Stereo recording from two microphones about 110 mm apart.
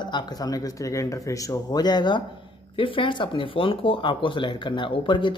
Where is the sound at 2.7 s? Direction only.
50° left (ahead or behind).